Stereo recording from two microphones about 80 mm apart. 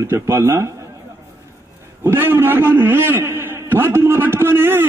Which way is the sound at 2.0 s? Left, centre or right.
Right.